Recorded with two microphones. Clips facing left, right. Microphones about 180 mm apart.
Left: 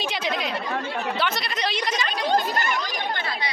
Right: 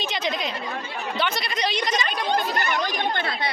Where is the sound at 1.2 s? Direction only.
Centre (ahead or behind).